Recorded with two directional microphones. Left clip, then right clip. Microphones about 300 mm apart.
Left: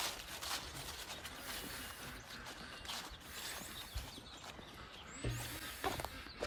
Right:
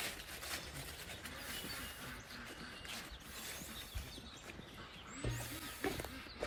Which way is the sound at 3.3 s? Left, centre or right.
Centre.